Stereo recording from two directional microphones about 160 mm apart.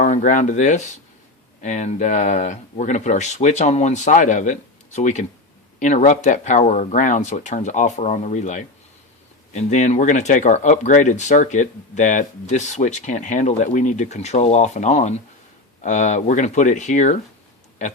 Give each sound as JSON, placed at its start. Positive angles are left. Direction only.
{"t": 0.0, "sound": "speech", "side_deg": 55}